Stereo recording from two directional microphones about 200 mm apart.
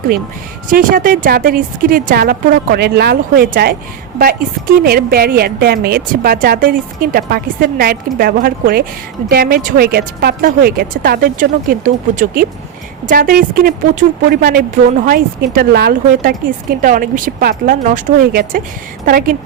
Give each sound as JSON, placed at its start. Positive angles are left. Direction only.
{"t": 0.7, "sound": "a woman's voice", "side_deg": -45}